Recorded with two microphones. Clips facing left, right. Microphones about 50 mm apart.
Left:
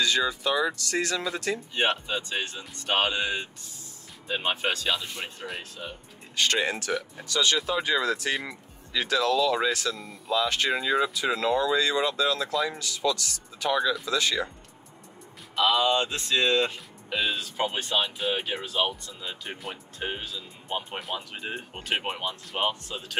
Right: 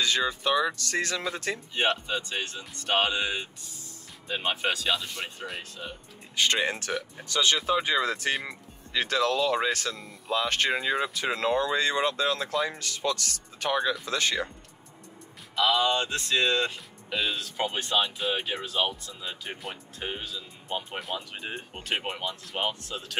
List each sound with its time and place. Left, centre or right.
0.0 s speech: right
1.8 s speech: centre
6.3 s speech: right
8.9 s speech: right
10.7 s speech: right
11.1 s speech: right
15.5 s speech: centre